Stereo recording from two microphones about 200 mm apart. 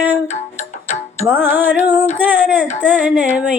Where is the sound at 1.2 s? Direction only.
10° right (ahead or behind).